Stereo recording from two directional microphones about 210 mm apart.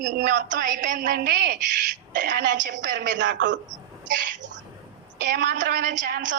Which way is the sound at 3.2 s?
60° right (ahead or behind).